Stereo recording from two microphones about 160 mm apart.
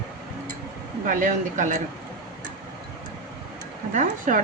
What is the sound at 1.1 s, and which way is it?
Speech, 55° right (ahead or behind).